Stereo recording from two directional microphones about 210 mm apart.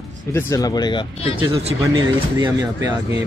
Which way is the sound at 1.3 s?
30° right (ahead or behind).